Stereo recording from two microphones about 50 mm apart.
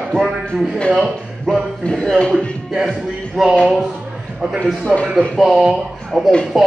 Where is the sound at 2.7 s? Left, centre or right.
Centre.